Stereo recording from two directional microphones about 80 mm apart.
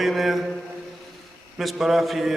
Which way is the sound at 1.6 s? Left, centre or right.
Centre.